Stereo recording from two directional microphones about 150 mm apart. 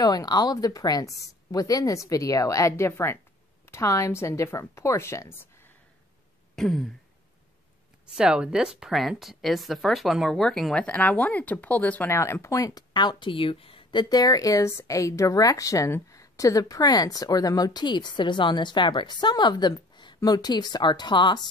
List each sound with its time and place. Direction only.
0.0 s speech: 25° left (ahead or behind)
6.5 s a sound: centre (ahead or behind)
8.2 s speech: 5° right (ahead or behind); by 21.5 s 30° left (ahead or behind)